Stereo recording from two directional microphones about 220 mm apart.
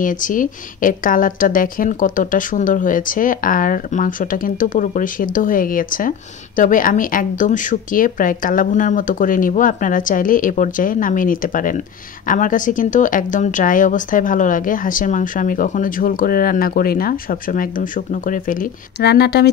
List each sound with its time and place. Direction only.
0.0 s speech: 35° left (ahead or behind)